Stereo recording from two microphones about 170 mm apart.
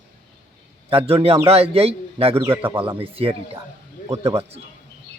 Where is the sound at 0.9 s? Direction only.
35° right (ahead or behind).